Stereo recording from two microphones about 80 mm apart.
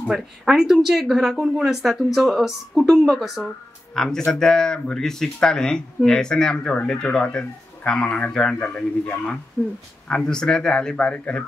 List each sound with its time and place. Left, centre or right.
0.0 s speech: centre